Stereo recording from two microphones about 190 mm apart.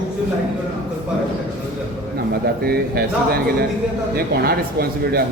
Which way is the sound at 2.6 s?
55° right (ahead or behind).